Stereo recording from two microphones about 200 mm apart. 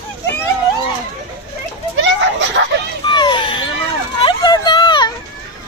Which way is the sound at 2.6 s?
70° right (ahead or behind).